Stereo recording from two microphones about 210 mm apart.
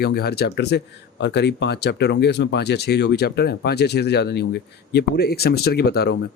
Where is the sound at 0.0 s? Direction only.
50° left (ahead or behind).